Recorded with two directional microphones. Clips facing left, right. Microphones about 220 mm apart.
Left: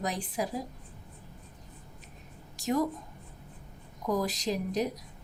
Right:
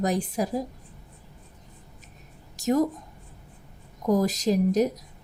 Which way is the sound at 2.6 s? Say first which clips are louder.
Right 6 dB; 45° right (ahead or behind).